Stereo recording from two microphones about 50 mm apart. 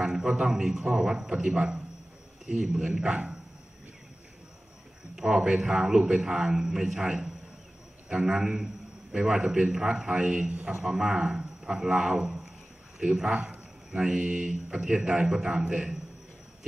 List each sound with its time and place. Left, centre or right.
0.0 s a man's voice: centre
5.1 s a man's voice: centre
13.3 s a man's voice: right
13.9 s a man's voice: centre
14.5 s a man's voice: centre